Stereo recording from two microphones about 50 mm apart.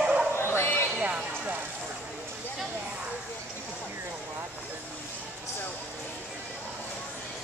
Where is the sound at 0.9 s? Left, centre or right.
Right.